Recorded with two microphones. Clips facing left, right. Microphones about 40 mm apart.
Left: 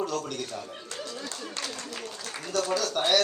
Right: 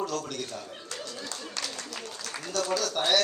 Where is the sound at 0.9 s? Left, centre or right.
Left.